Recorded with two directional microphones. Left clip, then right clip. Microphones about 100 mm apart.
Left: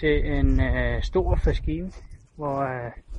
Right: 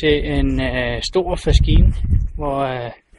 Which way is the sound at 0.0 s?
30° right (ahead or behind).